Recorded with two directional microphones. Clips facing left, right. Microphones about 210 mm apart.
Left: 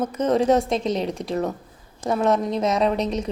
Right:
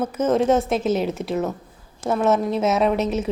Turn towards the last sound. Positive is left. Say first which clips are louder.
# right 2 dB
turn(degrees=-5)  # may be behind; listen again after turning